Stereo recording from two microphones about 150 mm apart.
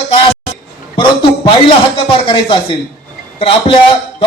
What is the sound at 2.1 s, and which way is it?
A man's voice, 35° left (ahead or behind).